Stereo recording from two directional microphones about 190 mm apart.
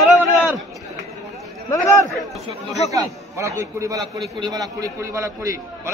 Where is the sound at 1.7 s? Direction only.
15° left (ahead or behind).